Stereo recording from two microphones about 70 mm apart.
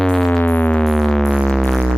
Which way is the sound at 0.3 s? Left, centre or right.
Left.